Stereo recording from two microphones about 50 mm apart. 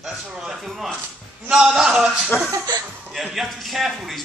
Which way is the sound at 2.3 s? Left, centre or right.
Left.